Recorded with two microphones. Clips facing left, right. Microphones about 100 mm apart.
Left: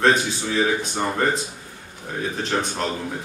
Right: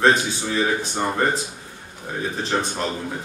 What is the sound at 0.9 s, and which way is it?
Speech, 5° right (ahead or behind).